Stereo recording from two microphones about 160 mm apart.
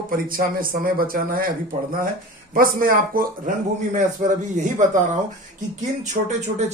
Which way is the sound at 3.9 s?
50° right (ahead or behind).